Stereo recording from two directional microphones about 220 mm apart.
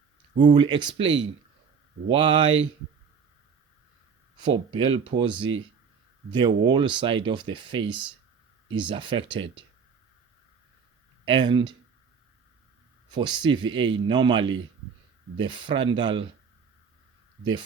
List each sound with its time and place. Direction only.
0.3 s speech: 20° right (ahead or behind)
1.0 s speech: 55° right (ahead or behind)
2.0 s speech: 20° right (ahead or behind)
4.4 s speech: 20° right (ahead or behind)
6.3 s speech: 20° right (ahead or behind)
11.3 s speech: 20° right (ahead or behind)
13.1 s speech: 20° right (ahead or behind)